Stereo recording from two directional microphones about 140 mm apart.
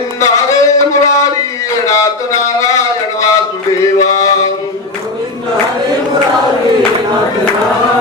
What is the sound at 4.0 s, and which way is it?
Mantra, 25° left (ahead or behind).